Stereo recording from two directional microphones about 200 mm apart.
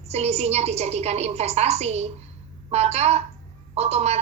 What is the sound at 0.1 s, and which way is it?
A woman's voice, 30° right (ahead or behind).